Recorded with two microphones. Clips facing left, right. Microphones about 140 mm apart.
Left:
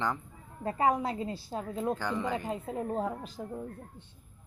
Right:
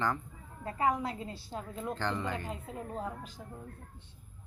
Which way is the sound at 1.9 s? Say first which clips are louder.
Left 3 dB; 10° left (ahead or behind).